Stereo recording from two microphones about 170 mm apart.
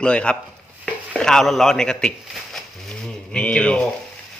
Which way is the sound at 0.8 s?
5° left (ahead or behind).